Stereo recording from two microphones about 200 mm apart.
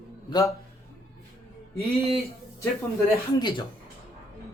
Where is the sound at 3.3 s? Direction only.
20° left (ahead or behind).